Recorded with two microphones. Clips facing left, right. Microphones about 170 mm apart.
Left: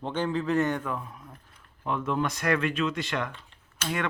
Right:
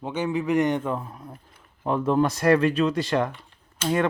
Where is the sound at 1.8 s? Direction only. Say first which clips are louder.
Right 7 dB; 35° right (ahead or behind).